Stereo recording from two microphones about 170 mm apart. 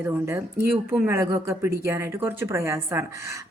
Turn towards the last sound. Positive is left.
turn(degrees=-15)  # may be behind; listen again after turning